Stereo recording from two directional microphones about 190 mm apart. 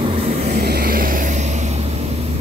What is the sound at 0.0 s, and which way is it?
Vehicle, 30° right (ahead or behind).